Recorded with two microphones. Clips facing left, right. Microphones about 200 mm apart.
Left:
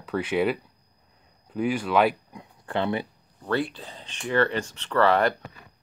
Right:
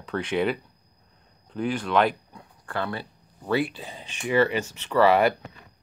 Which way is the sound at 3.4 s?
10° right (ahead or behind).